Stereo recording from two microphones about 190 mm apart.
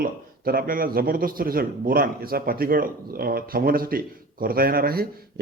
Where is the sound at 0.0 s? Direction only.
50° right (ahead or behind).